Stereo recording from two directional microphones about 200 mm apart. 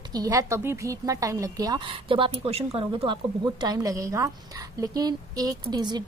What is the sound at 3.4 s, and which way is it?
A woman's voice, 20° right (ahead or behind).